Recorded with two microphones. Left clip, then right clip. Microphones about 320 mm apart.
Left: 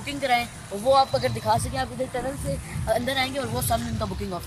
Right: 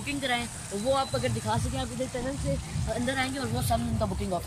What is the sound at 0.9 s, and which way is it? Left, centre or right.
Speech, centre.